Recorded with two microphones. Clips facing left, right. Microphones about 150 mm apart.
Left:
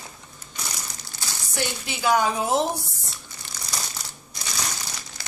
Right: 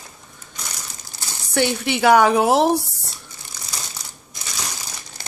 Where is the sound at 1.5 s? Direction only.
65° right (ahead or behind).